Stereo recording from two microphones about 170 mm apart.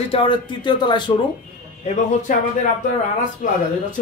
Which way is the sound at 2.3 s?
50° left (ahead or behind).